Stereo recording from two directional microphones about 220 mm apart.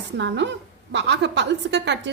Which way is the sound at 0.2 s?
55° right (ahead or behind).